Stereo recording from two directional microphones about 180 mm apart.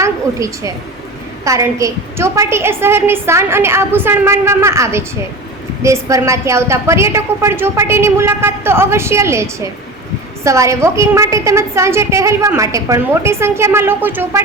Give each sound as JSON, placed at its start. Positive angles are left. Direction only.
{"t": 0.0, "sound": "a woman's voice", "side_deg": -15}